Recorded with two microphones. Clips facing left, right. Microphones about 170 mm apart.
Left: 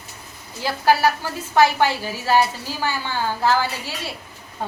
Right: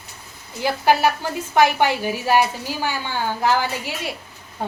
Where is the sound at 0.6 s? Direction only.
15° right (ahead or behind).